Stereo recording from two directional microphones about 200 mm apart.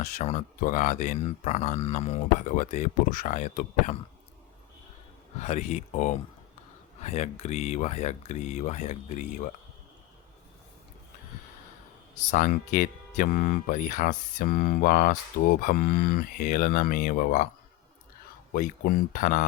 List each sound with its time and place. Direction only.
0.0 s speech: 40° left (ahead or behind)
5.4 s speech: 35° left (ahead or behind)
12.1 s speech: 40° left (ahead or behind)
18.5 s speech: 45° left (ahead or behind)